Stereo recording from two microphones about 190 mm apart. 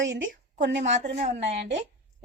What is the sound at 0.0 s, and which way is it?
A woman's voice, 75° right (ahead or behind).